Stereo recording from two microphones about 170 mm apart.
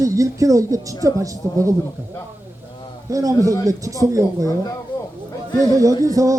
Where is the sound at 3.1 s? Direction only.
20° right (ahead or behind).